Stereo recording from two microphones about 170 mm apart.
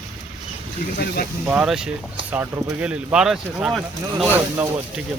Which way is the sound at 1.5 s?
5° right (ahead or behind).